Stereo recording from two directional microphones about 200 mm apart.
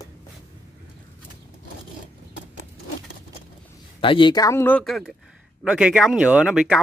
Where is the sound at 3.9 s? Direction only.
25° left (ahead or behind); by 6.8 s 5° right (ahead or behind).